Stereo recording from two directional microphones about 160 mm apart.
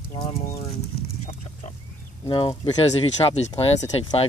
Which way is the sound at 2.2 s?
30° left (ahead or behind).